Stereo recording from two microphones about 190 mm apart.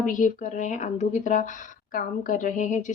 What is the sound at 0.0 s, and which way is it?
A woman's voice, 45° left (ahead or behind).